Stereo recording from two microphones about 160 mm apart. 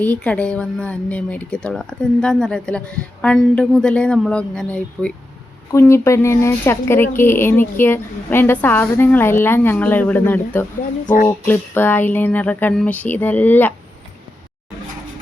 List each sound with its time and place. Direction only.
0.0 s speech: 10° left (ahead or behind)
5.7 s speech: 15° left (ahead or behind)
11.0 s speech: 60° left (ahead or behind)
11.3 s speech: 15° left (ahead or behind)